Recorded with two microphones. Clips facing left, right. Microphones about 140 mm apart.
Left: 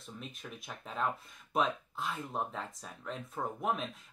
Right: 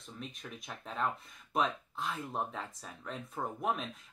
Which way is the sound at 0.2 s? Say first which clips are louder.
Right 4 dB; centre (ahead or behind).